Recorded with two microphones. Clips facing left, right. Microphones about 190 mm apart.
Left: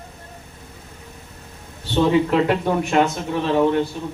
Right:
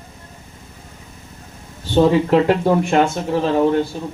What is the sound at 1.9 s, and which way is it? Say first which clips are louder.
Speech: right 3 dB; 35° right (ahead or behind).